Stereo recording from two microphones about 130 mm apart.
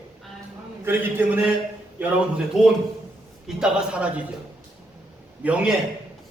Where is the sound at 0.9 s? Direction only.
15° right (ahead or behind).